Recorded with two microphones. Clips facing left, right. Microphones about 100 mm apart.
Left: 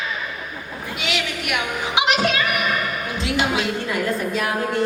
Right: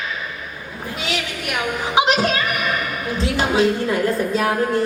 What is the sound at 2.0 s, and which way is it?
Music, 35° right (ahead or behind).